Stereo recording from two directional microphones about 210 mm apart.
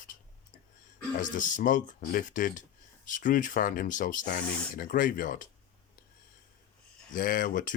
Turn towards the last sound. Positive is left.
turn(degrees=40)  # may be behind; listen again after turning